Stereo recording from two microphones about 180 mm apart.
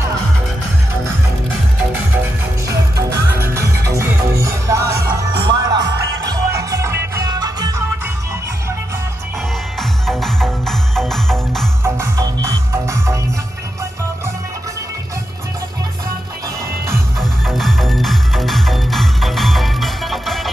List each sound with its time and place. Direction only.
3.4 s music: 15° right (ahead or behind)
9.8 s music: centre (ahead or behind)
11.8 s music: 15° right (ahead or behind)
17.2 s music: centre (ahead or behind)